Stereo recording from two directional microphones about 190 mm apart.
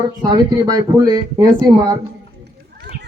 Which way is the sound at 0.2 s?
20° right (ahead or behind).